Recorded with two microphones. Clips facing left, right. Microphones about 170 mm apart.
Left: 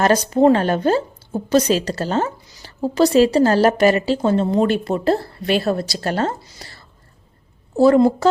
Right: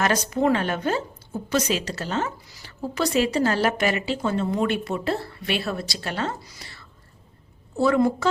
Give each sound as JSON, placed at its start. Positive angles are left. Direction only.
{"t": 0.0, "sound": "a woman's voice", "side_deg": 35}
{"t": 6.6, "sound": "whispering", "side_deg": 40}
{"t": 7.8, "sound": "a woman's voice", "side_deg": 35}